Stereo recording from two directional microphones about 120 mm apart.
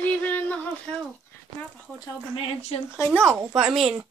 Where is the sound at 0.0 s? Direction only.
15° left (ahead or behind).